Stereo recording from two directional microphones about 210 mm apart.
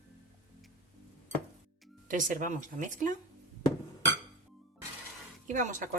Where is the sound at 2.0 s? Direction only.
40° right (ahead or behind).